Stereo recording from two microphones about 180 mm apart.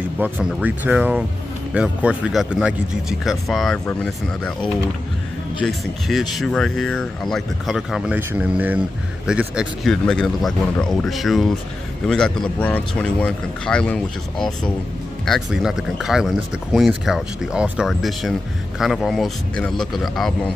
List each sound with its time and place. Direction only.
0.2 s speech: 5° right (ahead or behind)